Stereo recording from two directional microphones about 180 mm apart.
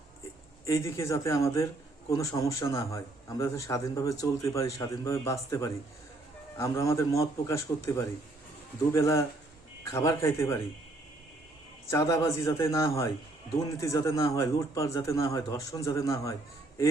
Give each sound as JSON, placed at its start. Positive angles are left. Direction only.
{"t": 0.6, "sound": "a man's voice", "side_deg": 15}
{"t": 11.9, "sound": "a man's voice", "side_deg": 15}